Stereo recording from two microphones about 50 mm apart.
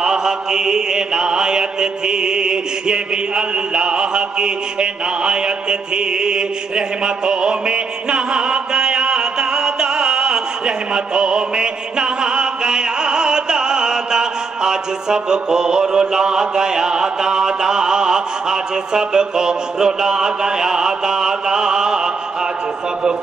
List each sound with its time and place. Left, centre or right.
0.0 s mantra: centre
7.2 s music: centre